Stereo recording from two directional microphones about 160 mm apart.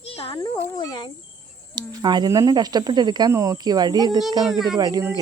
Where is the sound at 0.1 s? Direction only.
35° left (ahead or behind).